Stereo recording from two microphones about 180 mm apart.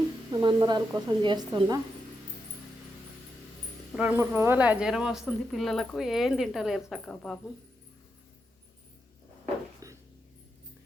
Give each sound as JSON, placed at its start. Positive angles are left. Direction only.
{"t": 0.3, "sound": "a woman's voice", "side_deg": -25}
{"t": 3.9, "sound": "speech", "side_deg": -10}
{"t": 9.8, "sound": "a sound", "side_deg": -20}